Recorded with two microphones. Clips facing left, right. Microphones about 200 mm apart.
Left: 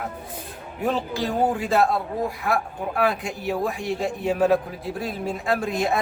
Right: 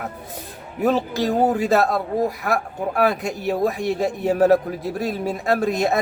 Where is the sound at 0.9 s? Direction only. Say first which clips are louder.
Right 5 dB; 40° right (ahead or behind).